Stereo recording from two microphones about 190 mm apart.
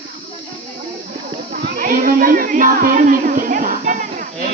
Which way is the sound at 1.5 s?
55° right (ahead or behind).